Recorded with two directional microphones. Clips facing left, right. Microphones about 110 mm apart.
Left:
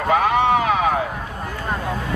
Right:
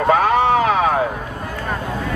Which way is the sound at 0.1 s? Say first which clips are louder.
Right 1 dB; 40° right (ahead or behind).